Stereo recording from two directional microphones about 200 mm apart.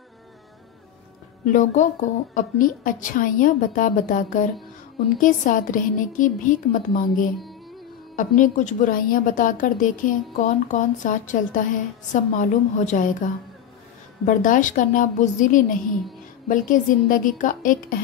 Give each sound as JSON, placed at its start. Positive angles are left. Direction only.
{"t": 1.5, "sound": "a woman's voice", "side_deg": 40}
{"t": 8.2, "sound": "a woman's voice", "side_deg": 40}